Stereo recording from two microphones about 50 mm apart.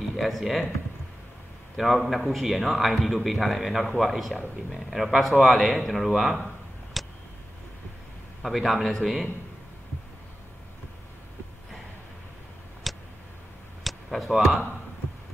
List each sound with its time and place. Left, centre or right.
0.1 s speech: centre
1.8 s a man's voice: centre
6.3 s a sound: centre
8.4 s a man's voice: centre
12.9 s tick: centre
13.8 s speech: centre